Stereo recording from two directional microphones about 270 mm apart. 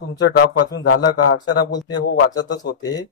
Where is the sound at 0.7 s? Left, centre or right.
Left.